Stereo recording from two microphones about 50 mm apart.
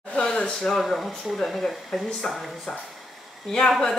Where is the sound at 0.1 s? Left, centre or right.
Centre.